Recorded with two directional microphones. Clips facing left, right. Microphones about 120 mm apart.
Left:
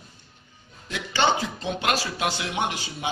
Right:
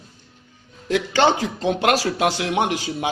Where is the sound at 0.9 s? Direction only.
90° right.